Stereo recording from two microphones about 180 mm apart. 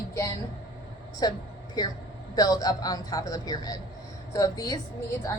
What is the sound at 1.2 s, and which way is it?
A woman's voice, 20° left (ahead or behind).